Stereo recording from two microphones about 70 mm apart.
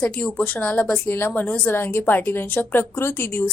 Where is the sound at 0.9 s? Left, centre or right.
Left.